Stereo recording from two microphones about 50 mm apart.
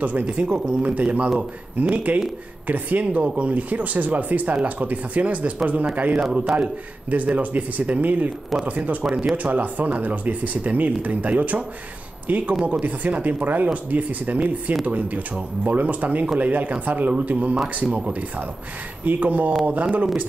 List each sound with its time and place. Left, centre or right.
0.0 s speech: right
6.1 s a man's voice: centre
6.5 s speech: right
19.0 s speech: right